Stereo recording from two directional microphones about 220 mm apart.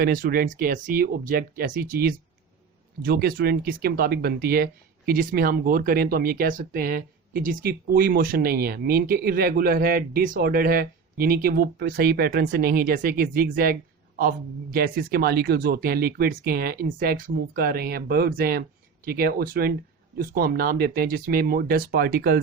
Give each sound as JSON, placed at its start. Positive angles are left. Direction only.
{"t": 0.0, "sound": "speech", "side_deg": -40}